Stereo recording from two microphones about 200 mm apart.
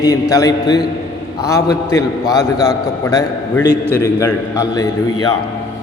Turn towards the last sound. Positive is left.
turn(degrees=20)  # may be behind; listen again after turning